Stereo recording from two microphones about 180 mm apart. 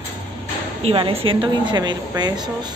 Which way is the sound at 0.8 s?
30° right (ahead or behind).